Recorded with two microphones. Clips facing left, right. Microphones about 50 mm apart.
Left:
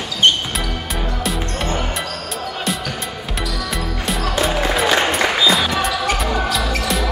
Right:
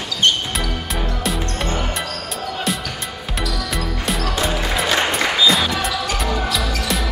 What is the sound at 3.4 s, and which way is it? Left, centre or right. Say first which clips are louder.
Music: right 1 dB; centre.